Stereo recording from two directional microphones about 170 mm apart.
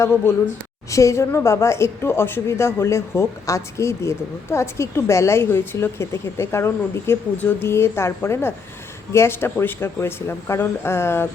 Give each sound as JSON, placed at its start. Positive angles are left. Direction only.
{"t": 0.0, "sound": "a woman's voice", "side_deg": 15}